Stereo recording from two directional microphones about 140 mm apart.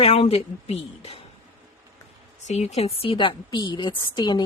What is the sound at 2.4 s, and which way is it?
A woman's voice, 50° left (ahead or behind).